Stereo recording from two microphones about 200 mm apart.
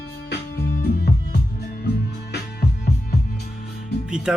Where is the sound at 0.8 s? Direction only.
50° left (ahead or behind).